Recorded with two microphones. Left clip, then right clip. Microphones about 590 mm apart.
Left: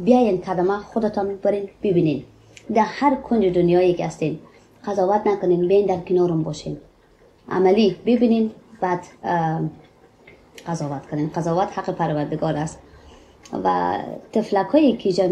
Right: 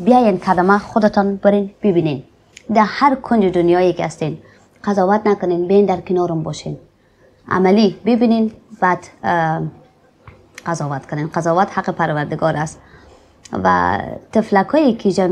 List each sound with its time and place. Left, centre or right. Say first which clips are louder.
0.0 s a woman's voice: right 5 dB; right
10.6 s a woman's voice: right 6 dB; right